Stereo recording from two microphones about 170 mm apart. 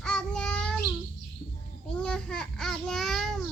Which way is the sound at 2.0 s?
5° left (ahead or behind).